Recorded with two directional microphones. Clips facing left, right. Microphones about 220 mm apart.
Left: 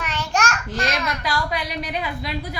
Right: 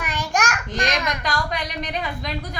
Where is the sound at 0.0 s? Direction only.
15° right (ahead or behind).